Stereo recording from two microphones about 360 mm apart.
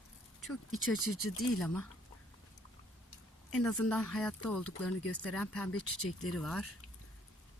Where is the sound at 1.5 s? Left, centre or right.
Centre.